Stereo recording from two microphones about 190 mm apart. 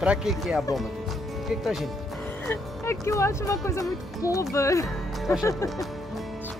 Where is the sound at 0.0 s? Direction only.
5° right (ahead or behind).